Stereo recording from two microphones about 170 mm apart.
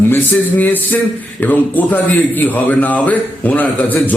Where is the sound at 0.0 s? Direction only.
10° left (ahead or behind).